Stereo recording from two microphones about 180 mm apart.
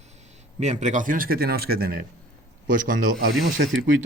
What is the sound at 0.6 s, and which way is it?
Speech, 40° right (ahead or behind).